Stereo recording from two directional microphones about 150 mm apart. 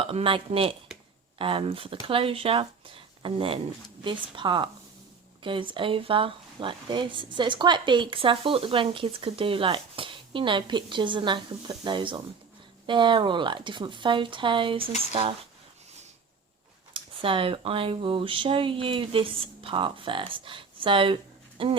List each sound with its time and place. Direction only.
0.0 s speech: 40° right (ahead or behind)
16.9 s speech: 35° right (ahead or behind)